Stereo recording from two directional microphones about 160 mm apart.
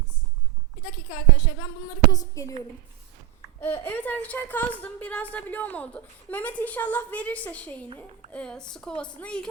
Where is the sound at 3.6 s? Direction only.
15° left (ahead or behind).